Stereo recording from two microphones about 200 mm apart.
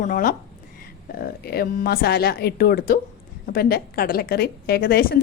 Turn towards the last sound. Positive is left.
turn(degrees=50)  # may be behind; listen again after turning